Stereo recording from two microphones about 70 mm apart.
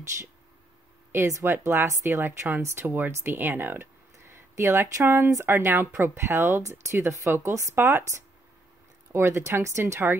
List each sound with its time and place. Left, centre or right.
1.2 s speech: right
1.5 s speech: right
4.3 s speech: right